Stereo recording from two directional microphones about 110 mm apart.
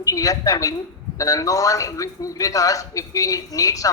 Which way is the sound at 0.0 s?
35° left (ahead or behind).